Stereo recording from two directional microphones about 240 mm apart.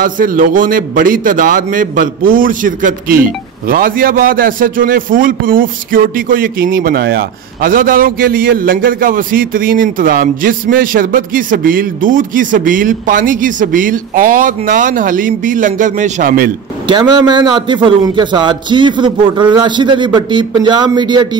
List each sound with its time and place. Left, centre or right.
0.0 s a man's voice: right
16.8 s a man's voice: centre